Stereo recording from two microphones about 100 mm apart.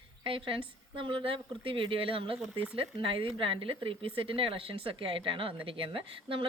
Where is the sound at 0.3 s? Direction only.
60° right (ahead or behind).